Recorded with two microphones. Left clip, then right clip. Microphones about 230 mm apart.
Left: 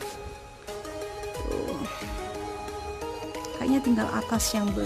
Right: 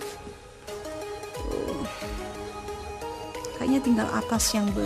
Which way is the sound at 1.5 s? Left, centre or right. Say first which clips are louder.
Right 1 dB; centre.